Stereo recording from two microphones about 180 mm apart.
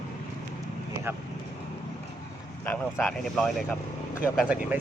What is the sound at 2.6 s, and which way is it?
A man's voice, 5° left (ahead or behind).